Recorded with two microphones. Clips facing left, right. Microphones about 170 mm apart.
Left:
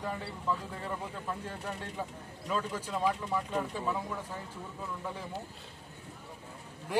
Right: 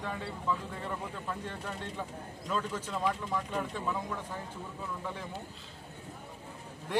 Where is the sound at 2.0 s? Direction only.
10° left (ahead or behind).